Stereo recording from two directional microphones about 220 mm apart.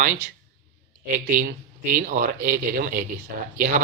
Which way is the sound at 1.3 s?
40° right (ahead or behind).